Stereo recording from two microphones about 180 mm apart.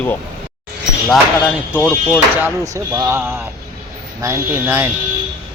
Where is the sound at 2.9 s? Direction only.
15° right (ahead or behind).